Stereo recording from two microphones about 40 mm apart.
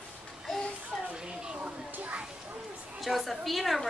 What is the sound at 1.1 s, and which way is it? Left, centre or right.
Speech, right.